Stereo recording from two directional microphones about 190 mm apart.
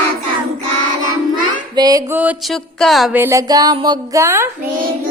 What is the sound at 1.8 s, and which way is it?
Music, 20° right (ahead or behind).